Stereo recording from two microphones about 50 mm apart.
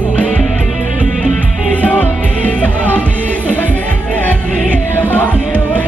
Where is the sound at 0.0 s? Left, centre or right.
Left.